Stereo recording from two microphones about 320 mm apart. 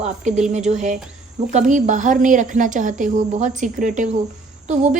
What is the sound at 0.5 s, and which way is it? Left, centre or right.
A woman's voice, right.